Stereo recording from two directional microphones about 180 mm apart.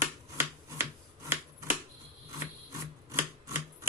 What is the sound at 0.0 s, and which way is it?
Finger snapping, 10° right (ahead or behind).